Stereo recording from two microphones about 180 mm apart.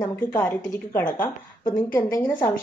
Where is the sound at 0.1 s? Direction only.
15° left (ahead or behind).